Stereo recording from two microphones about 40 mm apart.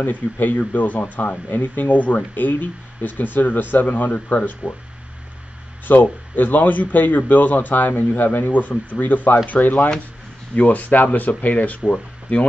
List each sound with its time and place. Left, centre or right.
0.0 s a man's voice: left
5.9 s a man's voice: left